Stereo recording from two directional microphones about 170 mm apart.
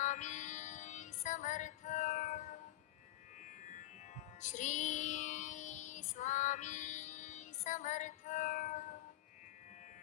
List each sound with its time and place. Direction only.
0.0 s music: 45° left (ahead or behind)